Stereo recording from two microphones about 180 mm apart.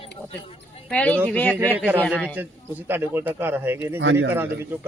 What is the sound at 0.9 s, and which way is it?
Speech, 5° left (ahead or behind).